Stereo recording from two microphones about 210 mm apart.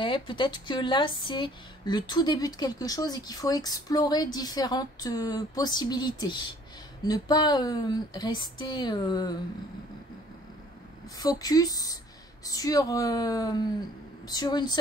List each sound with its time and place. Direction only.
0.0 s speech: 25° left (ahead or behind)
11.1 s speech: 20° left (ahead or behind)